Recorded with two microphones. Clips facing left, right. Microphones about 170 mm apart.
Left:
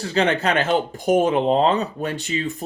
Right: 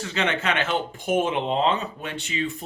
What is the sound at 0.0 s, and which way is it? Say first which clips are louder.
Speech: left 6 dB; 35° left (ahead or behind).